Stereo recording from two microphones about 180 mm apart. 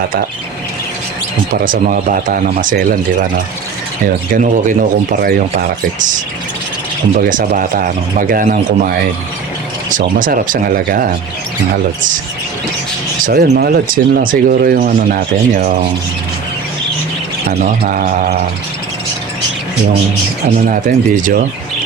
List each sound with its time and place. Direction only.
1.6 s speech: 50° right (ahead or behind)
7.2 s speech: 50° right (ahead or behind)
10.2 s speech: 50° right (ahead or behind)
13.2 s speech: 60° right (ahead or behind)
17.5 s speech: 50° right (ahead or behind)
20.7 s speech: 50° right (ahead or behind)